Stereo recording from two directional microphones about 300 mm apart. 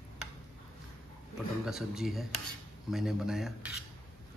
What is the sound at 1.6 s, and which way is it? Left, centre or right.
Speech, centre.